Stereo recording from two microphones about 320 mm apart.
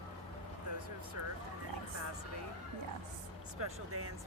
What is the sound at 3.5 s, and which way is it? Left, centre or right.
Speech, right.